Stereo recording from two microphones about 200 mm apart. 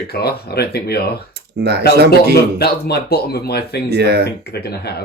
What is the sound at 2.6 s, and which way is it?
Speech, 55° left (ahead or behind).